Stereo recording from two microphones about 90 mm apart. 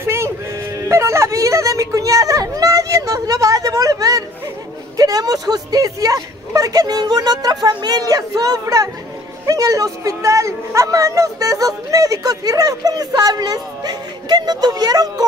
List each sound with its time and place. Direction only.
0.0 s sheep: 30° right (ahead or behind)
0.7 s a sound: 35° right (ahead or behind)
4.9 s speech: 45° right (ahead or behind)